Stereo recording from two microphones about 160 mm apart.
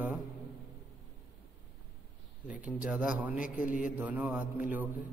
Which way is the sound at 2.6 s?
10° right (ahead or behind).